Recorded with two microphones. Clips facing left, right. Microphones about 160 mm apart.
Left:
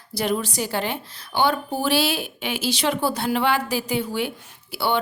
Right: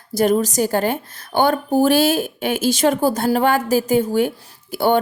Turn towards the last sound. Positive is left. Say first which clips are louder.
# right 7 dB
turn(degrees=-45)  # may be behind; listen again after turning